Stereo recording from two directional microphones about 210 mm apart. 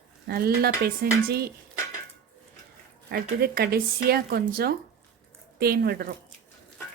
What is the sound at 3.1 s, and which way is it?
Speech, 50° right (ahead or behind).